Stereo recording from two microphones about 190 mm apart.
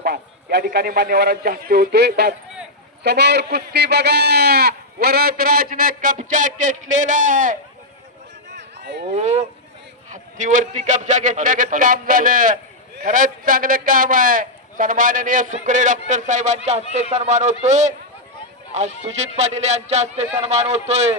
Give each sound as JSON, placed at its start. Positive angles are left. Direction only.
{"t": 0.0, "sound": "a man's voice", "side_deg": -60}
{"t": 8.4, "sound": "run", "side_deg": -65}
{"t": 9.0, "sound": "a man's voice", "side_deg": -35}
{"t": 19.0, "sound": "a man's voice", "side_deg": -35}